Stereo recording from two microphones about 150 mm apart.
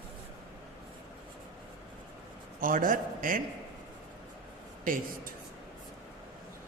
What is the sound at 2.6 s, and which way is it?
Speech, 65° right (ahead or behind).